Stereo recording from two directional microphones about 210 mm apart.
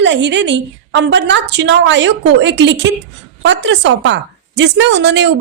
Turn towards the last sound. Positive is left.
turn(degrees=-60)  # may be behind; listen again after turning